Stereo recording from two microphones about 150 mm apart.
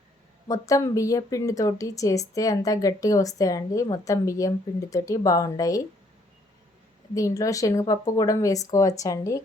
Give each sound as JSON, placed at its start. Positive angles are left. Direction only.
{"t": 0.4, "sound": "speech", "side_deg": 20}
{"t": 7.1, "sound": "speech", "side_deg": 20}